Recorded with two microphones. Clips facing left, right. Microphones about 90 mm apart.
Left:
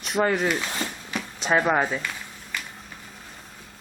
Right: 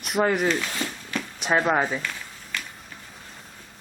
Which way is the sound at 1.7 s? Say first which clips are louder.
Even; centre (ahead or behind).